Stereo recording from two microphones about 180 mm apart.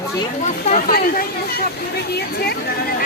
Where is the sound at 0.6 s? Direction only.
50° left (ahead or behind).